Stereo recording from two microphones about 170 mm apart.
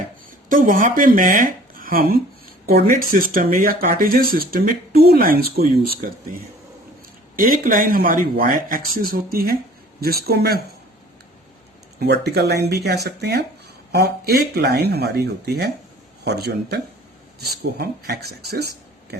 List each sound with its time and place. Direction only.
0.4 s speech: 50° right (ahead or behind); by 10.6 s 65° right (ahead or behind)
11.9 s speech: 75° right (ahead or behind)